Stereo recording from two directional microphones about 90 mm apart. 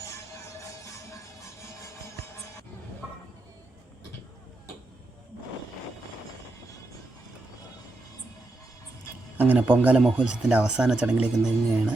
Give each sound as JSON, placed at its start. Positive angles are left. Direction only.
{"t": 9.4, "sound": "speech", "side_deg": -20}